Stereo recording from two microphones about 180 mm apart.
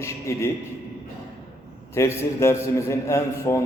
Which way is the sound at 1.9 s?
15° left (ahead or behind).